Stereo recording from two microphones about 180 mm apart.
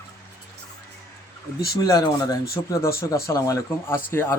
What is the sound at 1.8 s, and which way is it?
Speech, 20° left (ahead or behind).